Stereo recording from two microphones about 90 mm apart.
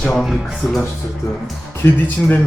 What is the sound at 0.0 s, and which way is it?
Speech, centre (ahead or behind).